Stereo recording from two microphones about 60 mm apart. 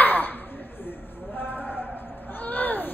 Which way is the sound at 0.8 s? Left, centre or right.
Left.